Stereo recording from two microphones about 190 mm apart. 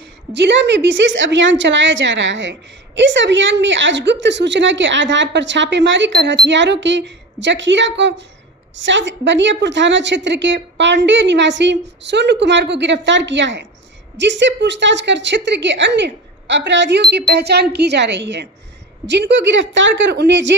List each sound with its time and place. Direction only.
0.3 s a woman's voice: 65° right (ahead or behind)